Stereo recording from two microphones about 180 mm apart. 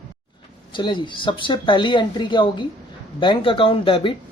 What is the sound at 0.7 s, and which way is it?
Speech, 25° left (ahead or behind).